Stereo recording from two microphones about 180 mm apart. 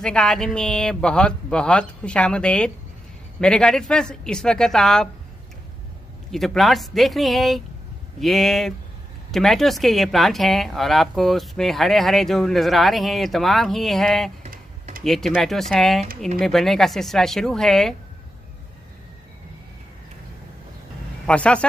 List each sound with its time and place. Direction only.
0.0 s speech: 5° left (ahead or behind)
6.3 s speech: centre (ahead or behind)
14.5 s typing: 50° right (ahead or behind)
15.0 s speech: centre (ahead or behind)
21.3 s speech: 5° left (ahead or behind)